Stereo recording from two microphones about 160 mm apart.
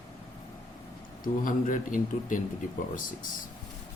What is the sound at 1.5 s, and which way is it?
Speech, 55° left (ahead or behind).